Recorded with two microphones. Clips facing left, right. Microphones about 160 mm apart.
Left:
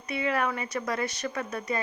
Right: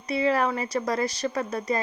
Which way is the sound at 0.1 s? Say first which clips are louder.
Right 5 dB; 35° right (ahead or behind).